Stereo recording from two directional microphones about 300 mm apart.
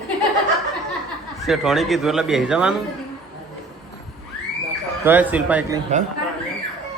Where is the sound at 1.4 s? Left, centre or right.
Centre.